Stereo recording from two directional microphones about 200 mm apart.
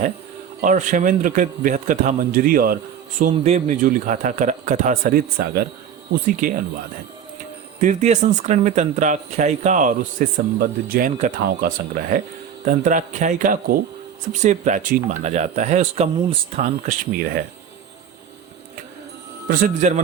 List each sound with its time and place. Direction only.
0.6 s speech: 40° right (ahead or behind)
7.8 s speech: 35° right (ahead or behind)
16.6 s speech: 45° right (ahead or behind)
19.5 s speech: 45° right (ahead or behind)